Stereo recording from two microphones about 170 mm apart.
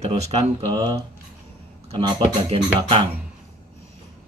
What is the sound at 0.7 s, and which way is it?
Speech, 20° right (ahead or behind).